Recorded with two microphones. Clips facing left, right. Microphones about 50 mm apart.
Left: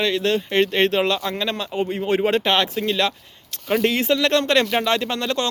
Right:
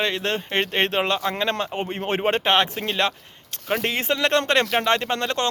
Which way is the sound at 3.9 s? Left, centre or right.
Right.